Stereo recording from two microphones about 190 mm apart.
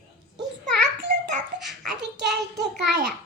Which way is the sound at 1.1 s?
40° right (ahead or behind).